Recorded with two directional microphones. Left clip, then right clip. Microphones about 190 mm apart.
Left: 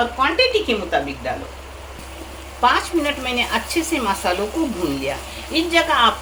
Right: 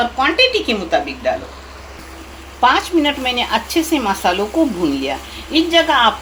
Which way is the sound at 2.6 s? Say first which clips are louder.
Right 4 dB; 35° right (ahead or behind).